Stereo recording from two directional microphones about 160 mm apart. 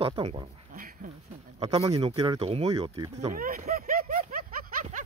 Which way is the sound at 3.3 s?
60° right (ahead or behind).